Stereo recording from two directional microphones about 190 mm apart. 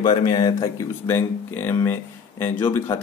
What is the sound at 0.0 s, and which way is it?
A man's voice, 25° left (ahead or behind).